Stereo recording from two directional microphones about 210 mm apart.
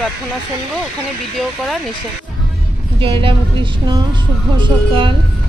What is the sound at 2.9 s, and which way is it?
Speech, 25° right (ahead or behind).